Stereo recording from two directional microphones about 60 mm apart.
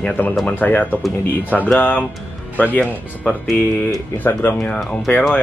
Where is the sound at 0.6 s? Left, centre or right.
Left.